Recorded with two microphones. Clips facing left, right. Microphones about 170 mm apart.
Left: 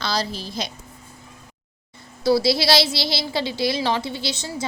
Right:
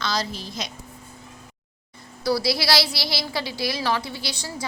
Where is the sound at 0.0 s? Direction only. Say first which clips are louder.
Left 2 dB; 30° left (ahead or behind).